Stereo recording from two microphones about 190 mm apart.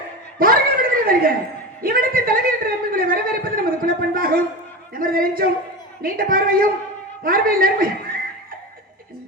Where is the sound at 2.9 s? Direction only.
50° right (ahead or behind).